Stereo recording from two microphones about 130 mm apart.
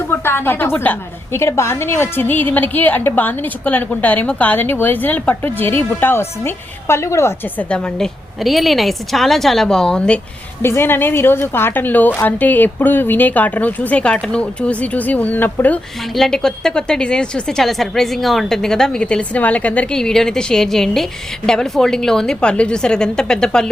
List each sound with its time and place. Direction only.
0.1 s a woman's voice: 15° left (ahead or behind)
7.7 s a woman's voice: 5° left (ahead or behind)
10.6 s a woman's voice: 20° left (ahead or behind)
16.1 s a woman's voice: 5° left (ahead or behind)